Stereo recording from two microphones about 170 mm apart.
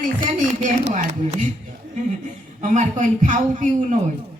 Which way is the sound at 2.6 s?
45° right (ahead or behind).